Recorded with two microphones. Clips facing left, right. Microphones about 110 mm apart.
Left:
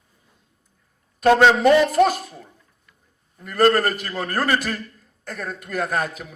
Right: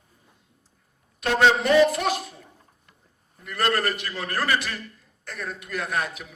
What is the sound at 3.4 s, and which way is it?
Speech, 40° left (ahead or behind).